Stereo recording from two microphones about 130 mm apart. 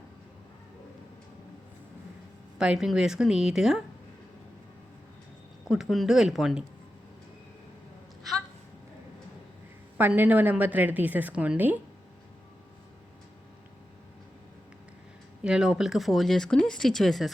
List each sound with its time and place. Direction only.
2.6 s speech: 5° right (ahead or behind)
5.7 s speech: centre (ahead or behind)
8.2 s a sound: centre (ahead or behind)
10.0 s a woman's voice: 15° right (ahead or behind)
15.4 s speech: 5° right (ahead or behind)